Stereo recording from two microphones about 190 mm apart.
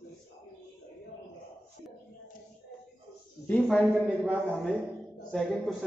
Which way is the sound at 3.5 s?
5° left (ahead or behind).